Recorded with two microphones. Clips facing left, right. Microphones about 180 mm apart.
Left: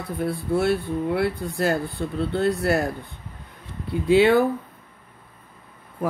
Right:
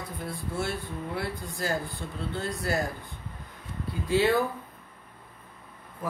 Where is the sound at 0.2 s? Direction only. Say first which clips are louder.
Left 11 dB; 60° left (ahead or behind).